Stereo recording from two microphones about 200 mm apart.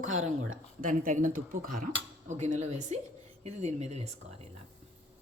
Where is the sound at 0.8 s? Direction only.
40° right (ahead or behind).